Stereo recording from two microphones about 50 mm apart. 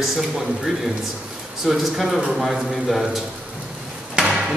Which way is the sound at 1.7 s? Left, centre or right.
Centre.